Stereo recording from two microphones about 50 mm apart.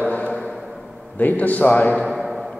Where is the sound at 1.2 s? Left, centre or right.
Left.